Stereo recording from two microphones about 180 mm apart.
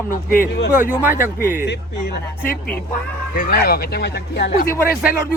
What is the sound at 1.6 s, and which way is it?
Speech, 70° left (ahead or behind).